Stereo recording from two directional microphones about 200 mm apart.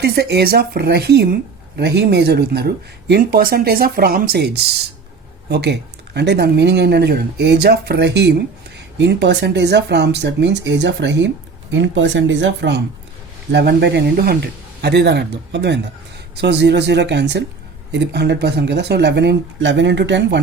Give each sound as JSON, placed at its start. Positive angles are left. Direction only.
{"t": 0.0, "sound": "speech", "side_deg": -55}